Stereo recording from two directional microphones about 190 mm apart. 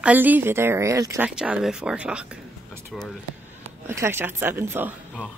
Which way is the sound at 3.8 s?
15° right (ahead or behind).